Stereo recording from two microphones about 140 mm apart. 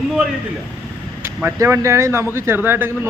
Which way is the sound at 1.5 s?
20° right (ahead or behind).